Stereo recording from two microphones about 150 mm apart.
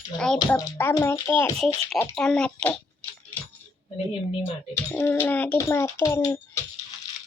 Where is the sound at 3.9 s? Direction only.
40° left (ahead or behind).